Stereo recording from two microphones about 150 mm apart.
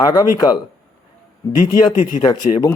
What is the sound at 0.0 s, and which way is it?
Speech, 25° left (ahead or behind).